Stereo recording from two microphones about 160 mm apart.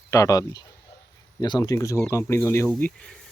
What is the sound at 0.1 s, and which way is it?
Speech, 20° left (ahead or behind).